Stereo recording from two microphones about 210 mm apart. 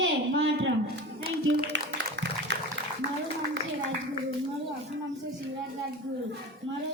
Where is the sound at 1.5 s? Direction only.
60° right (ahead or behind).